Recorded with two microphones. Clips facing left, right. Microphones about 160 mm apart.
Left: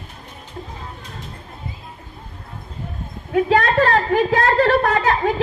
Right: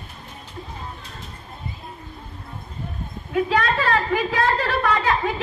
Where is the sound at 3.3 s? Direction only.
50° left (ahead or behind).